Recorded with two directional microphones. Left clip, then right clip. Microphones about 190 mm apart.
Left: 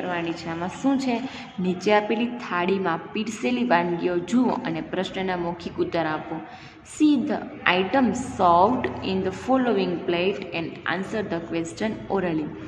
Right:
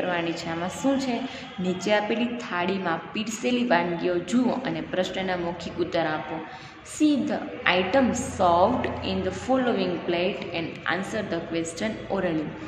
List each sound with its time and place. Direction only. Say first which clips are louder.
0.1 s a woman's voice: right 1 dB; 15° left (ahead or behind)
0.9 s a woman's voice: left 2 dB; 30° left (ahead or behind)